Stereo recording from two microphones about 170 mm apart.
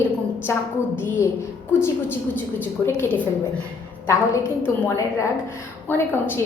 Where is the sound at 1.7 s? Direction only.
15° left (ahead or behind).